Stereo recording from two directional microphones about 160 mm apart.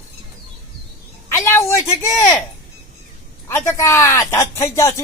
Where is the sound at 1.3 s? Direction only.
15° left (ahead or behind).